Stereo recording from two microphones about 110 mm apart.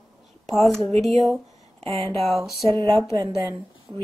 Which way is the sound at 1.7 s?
65° right (ahead or behind).